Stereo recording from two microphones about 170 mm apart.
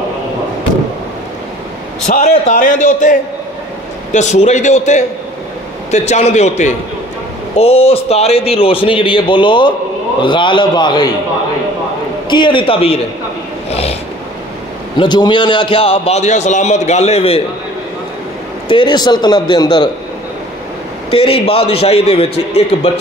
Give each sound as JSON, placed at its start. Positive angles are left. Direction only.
{"t": 2.0, "sound": "a man's voice", "side_deg": 45}
{"t": 12.3, "sound": "speech", "side_deg": 25}
{"t": 13.7, "sound": "a sound", "side_deg": 35}
{"t": 15.0, "sound": "a man's voice", "side_deg": 25}
{"t": 18.7, "sound": "speech", "side_deg": 30}
{"t": 21.1, "sound": "a man's voice", "side_deg": 30}